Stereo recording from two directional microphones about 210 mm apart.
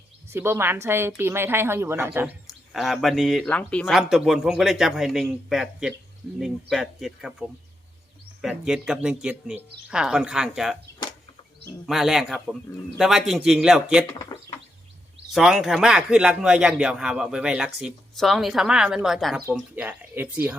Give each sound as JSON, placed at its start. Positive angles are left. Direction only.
{"t": 0.3, "sound": "a woman's voice", "side_deg": -10}
{"t": 11.9, "sound": "a woman's voice", "side_deg": 0}
{"t": 14.3, "sound": "a sound", "side_deg": 20}
{"t": 15.3, "sound": "a woman's voice", "side_deg": 0}